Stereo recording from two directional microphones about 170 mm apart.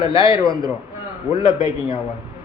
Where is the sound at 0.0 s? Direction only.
35° left (ahead or behind).